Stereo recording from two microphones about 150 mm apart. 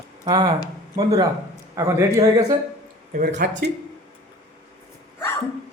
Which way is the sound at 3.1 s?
90° right.